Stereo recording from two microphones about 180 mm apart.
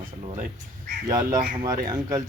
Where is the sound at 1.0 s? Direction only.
20° right (ahead or behind).